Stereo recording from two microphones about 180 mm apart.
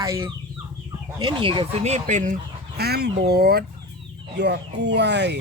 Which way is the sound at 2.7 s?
60° right (ahead or behind).